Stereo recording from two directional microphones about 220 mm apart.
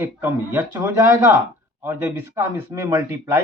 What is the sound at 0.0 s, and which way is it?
A man's voice, 10° right (ahead or behind).